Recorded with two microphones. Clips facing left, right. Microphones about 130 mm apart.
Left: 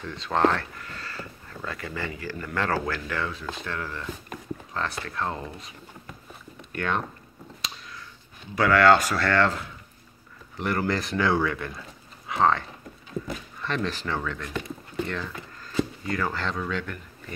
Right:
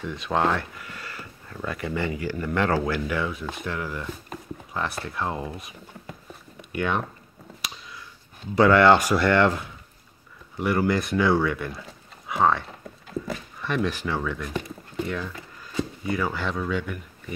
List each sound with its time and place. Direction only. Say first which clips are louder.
0.0 s speech: left 1 dB; 10° right (ahead or behind)
8.5 s speech: right 2 dB; 25° right (ahead or behind); by 17.0 s 5° right (ahead or behind)